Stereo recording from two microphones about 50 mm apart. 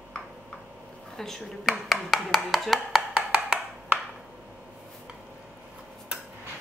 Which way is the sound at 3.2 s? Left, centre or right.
Centre.